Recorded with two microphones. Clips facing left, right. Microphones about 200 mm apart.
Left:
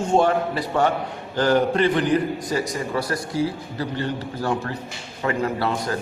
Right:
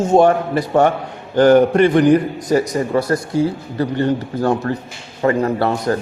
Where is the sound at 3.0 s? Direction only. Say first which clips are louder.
Right 8 dB; 25° right (ahead or behind).